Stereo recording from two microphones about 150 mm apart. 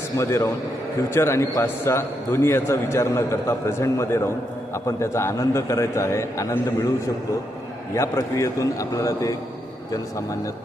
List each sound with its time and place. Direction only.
0.2 s a man's voice: 20° left (ahead or behind)
7.9 s a man's voice: 20° left (ahead or behind)